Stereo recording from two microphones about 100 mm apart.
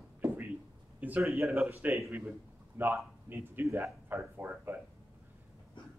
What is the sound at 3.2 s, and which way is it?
A man's voice, 25° right (ahead or behind).